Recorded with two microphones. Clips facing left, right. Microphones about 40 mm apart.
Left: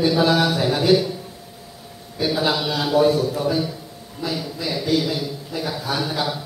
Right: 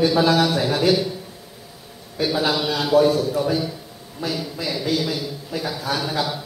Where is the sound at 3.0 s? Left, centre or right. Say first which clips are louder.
Even; centre.